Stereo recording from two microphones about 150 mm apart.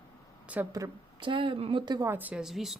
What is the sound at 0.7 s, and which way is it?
A woman's voice, 30° right (ahead or behind).